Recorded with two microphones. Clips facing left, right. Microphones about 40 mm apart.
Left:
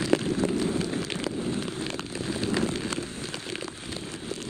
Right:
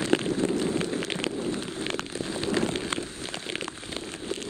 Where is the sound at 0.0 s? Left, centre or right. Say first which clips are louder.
Even; right.